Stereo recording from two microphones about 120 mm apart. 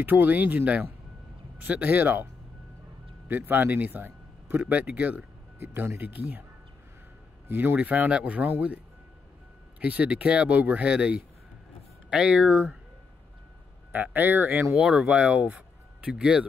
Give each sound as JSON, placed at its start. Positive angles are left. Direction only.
{"t": 0.0, "sound": "speech", "side_deg": -15}
{"t": 3.3, "sound": "speech", "side_deg": -15}
{"t": 7.4, "sound": "speech", "side_deg": -15}
{"t": 13.9, "sound": "speech", "side_deg": -15}